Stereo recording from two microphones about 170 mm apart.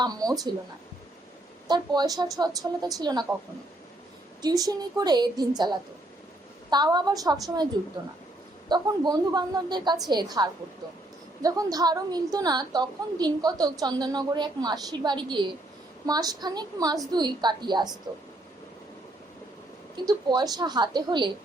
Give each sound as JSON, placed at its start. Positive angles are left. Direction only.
{"t": 0.0, "sound": "a woman's voice", "side_deg": -20}
{"t": 1.6, "sound": "a woman's voice", "side_deg": -25}
{"t": 4.4, "sound": "a woman's voice", "side_deg": -20}
{"t": 8.7, "sound": "a woman's voice", "side_deg": -25}
{"t": 20.1, "sound": "a woman's voice", "side_deg": -25}